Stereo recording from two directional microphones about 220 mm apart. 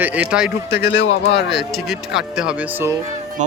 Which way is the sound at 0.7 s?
50° left (ahead or behind).